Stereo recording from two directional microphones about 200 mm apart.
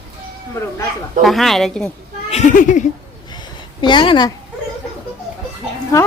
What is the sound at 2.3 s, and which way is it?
Speech, 40° left (ahead or behind).